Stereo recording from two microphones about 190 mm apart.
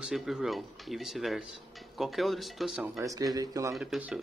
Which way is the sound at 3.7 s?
5° right (ahead or behind).